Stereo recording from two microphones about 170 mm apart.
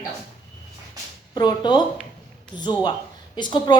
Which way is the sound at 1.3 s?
25° left (ahead or behind).